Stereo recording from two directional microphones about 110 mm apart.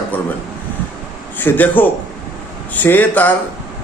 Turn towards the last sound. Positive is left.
turn(degrees=15)  # may be behind; listen again after turning